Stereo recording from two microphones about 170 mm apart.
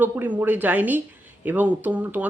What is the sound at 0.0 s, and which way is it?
Speech, 10° right (ahead or behind).